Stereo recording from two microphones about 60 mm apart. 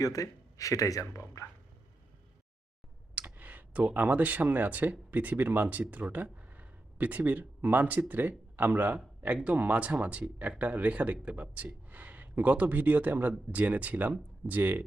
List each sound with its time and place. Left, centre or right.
0.0 s speech: left
3.3 s speech: right